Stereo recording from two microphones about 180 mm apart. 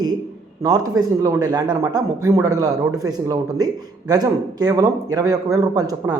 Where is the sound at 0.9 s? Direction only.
20° right (ahead or behind).